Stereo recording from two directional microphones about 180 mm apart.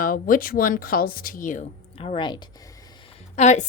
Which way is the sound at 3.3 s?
40° left (ahead or behind).